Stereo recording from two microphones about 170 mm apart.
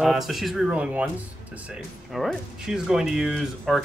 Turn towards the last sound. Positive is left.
turn(degrees=0)  # may be behind; listen again after turning